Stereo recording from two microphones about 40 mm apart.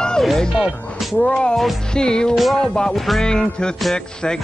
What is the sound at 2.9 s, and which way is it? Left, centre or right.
Music, centre.